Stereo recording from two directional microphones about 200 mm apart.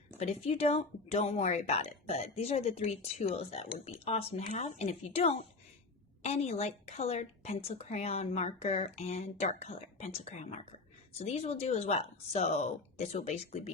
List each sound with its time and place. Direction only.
0.2 s a woman's voice: 30° left (ahead or behind)